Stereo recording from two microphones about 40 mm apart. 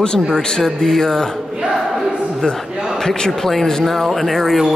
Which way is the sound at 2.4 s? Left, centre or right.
Left.